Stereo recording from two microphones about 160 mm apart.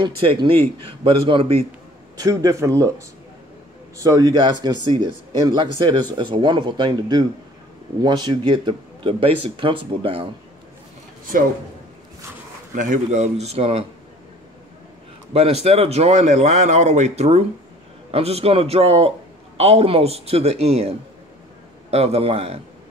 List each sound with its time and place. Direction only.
0.0 s a man's voice: 30° right (ahead or behind)
2.1 s speech: 20° right (ahead or behind)
4.0 s a man's voice: 20° right (ahead or behind)
11.3 s a man's voice: 60° right (ahead or behind)
12.7 s speech: 55° right (ahead or behind)
15.3 s a man's voice: 40° right (ahead or behind)
21.9 s a man's voice: 40° right (ahead or behind)